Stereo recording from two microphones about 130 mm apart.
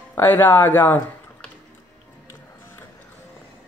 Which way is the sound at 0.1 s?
15° left (ahead or behind).